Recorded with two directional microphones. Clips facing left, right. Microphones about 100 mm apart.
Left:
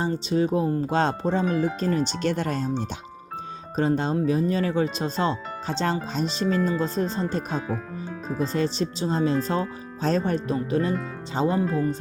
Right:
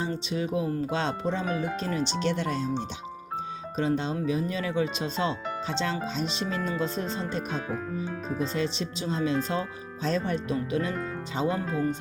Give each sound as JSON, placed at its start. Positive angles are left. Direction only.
{"t": 0.0, "sound": "speech", "side_deg": 35}
{"t": 3.8, "sound": "speech", "side_deg": 40}